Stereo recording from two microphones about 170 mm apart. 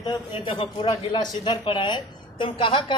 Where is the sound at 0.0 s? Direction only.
25° left (ahead or behind).